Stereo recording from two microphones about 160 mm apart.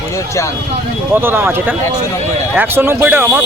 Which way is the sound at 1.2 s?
15° right (ahead or behind).